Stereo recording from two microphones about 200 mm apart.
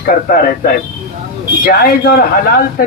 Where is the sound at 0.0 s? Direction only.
45° left (ahead or behind).